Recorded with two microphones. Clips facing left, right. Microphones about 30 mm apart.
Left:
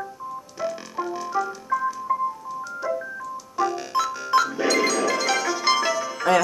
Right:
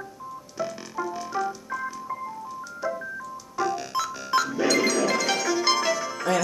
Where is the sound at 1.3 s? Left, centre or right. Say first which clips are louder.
Left 6 dB; centre.